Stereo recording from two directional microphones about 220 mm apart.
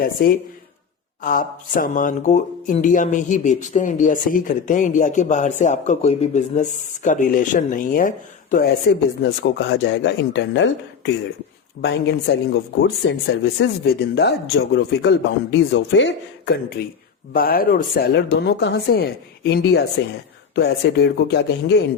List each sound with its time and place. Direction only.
0.2 s speech: 40° left (ahead or behind)